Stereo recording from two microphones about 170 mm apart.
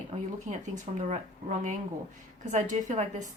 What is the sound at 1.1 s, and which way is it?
Speech, 45° right (ahead or behind).